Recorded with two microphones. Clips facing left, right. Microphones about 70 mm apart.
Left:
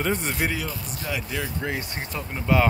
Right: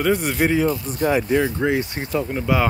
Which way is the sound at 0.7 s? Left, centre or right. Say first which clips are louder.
Right 11 dB; right.